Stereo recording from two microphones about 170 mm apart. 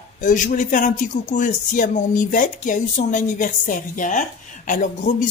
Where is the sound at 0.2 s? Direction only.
50° left (ahead or behind).